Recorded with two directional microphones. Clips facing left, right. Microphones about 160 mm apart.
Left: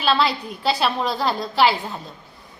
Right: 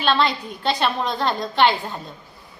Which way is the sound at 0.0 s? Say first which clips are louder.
Even; 5° left (ahead or behind).